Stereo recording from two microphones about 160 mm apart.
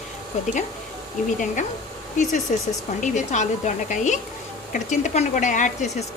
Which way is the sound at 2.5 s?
50° left (ahead or behind).